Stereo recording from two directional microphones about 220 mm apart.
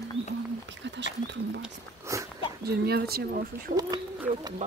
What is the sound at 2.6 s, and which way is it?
Speech, 45° right (ahead or behind).